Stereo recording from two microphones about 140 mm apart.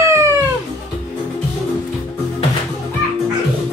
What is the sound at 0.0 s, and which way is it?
Music, 20° right (ahead or behind).